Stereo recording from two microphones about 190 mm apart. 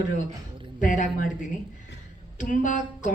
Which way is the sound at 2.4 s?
45° left (ahead or behind).